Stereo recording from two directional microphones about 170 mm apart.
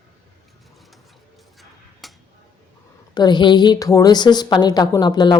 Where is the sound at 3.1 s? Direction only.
25° left (ahead or behind).